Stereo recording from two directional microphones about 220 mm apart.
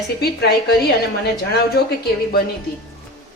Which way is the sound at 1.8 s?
45° left (ahead or behind).